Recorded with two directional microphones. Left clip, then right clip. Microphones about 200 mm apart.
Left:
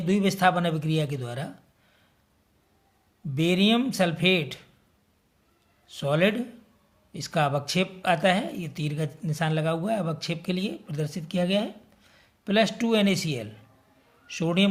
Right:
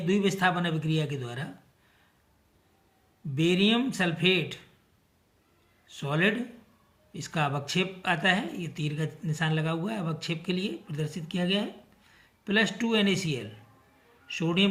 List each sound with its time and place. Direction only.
0.0 s speech: 45° left (ahead or behind)
3.3 s speech: 45° left (ahead or behind)
5.9 s speech: 45° left (ahead or behind)